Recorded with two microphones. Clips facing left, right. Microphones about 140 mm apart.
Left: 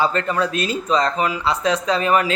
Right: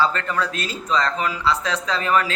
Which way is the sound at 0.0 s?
20° left (ahead or behind).